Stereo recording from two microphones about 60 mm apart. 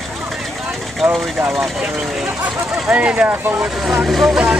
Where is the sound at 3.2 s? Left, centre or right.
Right.